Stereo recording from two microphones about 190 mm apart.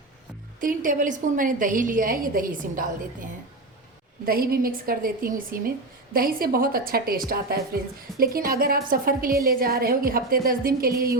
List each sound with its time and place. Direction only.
0.6 s a woman's voice: 45° right (ahead or behind)
4.3 s a woman's voice: 50° right (ahead or behind)